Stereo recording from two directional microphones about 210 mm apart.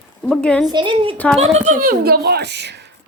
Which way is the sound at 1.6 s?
40° right (ahead or behind).